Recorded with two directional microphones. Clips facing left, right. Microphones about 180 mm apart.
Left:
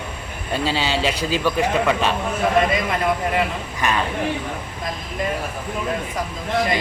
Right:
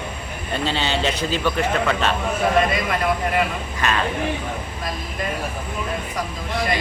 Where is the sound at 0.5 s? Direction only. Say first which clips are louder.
Left 1 dB; 5° left (ahead or behind).